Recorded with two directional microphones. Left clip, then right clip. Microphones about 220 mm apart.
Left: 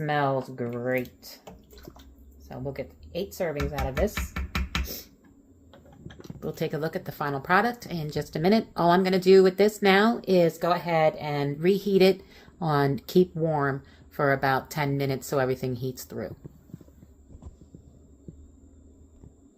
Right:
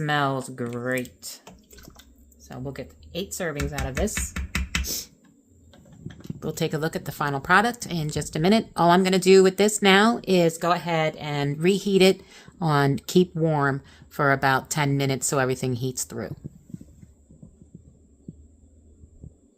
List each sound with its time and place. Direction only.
0.0 s speech: 30° right (ahead or behind)
2.5 s speech: 30° right (ahead or behind)
4.1 s music: 15° right (ahead or behind)
6.4 s speech: 30° right (ahead or behind)